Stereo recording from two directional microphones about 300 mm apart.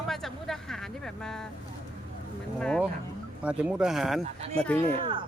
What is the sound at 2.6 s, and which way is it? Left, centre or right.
Speech, centre.